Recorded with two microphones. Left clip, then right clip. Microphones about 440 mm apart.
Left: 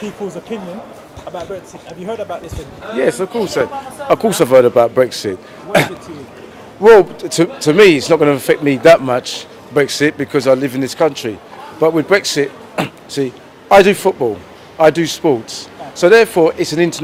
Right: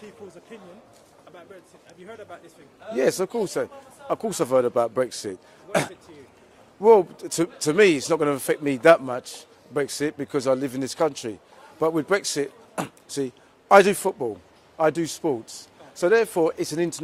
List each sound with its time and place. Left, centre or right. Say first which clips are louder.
2.9 s speech: left 7 dB; right
4.1 s a man's voice: left 13 dB; right
6.9 s a man's voice: left 9 dB; right